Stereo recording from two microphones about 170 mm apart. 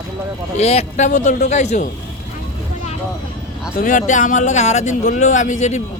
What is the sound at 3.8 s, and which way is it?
Speech, 50° left (ahead or behind).